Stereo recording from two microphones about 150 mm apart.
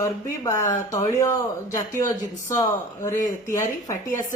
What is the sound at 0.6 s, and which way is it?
Speech, 55° left (ahead or behind).